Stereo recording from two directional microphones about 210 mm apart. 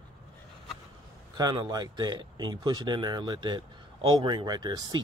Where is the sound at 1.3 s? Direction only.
20° right (ahead or behind).